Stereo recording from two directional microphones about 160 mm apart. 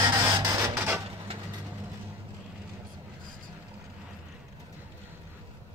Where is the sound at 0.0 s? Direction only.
25° right (ahead or behind).